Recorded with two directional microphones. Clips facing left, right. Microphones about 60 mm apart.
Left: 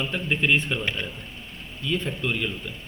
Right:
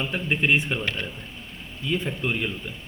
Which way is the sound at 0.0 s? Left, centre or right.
Right.